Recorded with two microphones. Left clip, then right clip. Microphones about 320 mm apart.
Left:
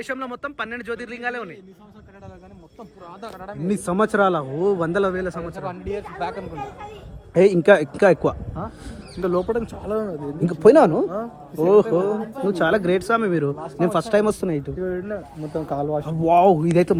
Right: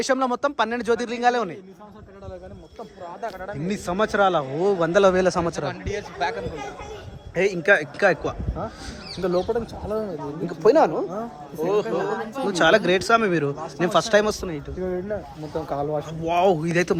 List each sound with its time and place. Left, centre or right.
0.0 s speech: centre
3.7 s a man's voice: centre
5.6 s speech: left
7.3 s speech: centre
9.2 s speech: left
10.0 s speech: left
12.5 s a man's voice: centre
14.4 s speech: centre